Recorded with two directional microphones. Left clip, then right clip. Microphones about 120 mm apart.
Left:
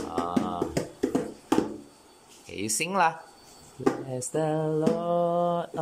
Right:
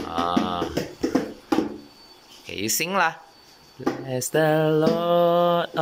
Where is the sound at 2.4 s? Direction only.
15° left (ahead or behind).